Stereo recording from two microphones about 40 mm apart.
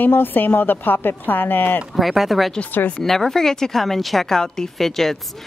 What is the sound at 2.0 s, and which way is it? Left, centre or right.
Speech, centre.